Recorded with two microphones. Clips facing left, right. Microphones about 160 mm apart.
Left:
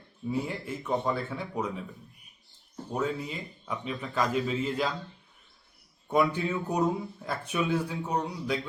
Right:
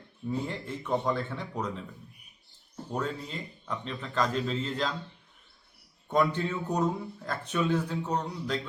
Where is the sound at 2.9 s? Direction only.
5° left (ahead or behind).